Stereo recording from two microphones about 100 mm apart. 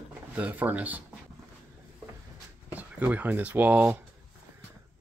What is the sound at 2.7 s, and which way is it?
Speech, 15° right (ahead or behind).